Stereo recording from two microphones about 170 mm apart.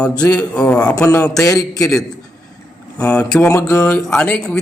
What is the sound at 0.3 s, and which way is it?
Speech, 5° left (ahead or behind).